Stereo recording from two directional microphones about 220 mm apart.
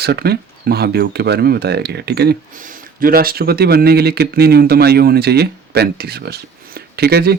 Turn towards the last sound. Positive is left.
turn(degrees=-45)  # may be behind; listen again after turning